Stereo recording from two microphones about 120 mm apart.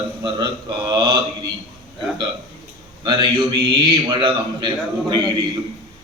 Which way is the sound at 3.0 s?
40° right (ahead or behind).